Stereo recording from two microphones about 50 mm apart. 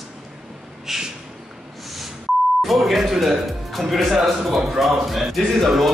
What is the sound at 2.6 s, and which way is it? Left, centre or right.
A man's voice, centre.